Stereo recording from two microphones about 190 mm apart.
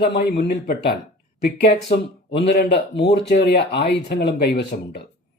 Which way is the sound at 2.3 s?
65° left (ahead or behind).